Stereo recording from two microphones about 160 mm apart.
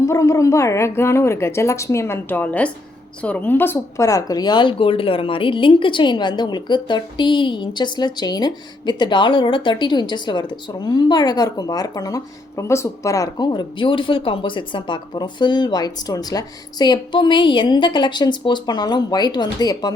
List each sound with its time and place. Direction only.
0.0 s speech: 20° left (ahead or behind)